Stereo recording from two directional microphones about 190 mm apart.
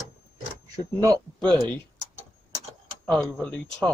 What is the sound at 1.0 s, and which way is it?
Speech, 15° right (ahead or behind).